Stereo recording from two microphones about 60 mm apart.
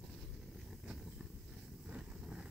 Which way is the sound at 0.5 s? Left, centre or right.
Centre.